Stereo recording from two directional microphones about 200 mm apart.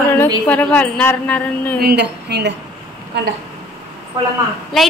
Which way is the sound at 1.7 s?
55° right (ahead or behind).